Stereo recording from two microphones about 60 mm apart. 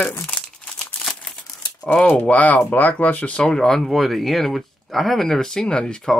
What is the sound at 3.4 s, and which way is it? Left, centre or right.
Speech, centre.